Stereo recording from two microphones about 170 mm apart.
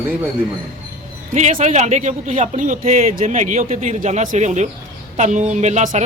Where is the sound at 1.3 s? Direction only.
45° right (ahead or behind).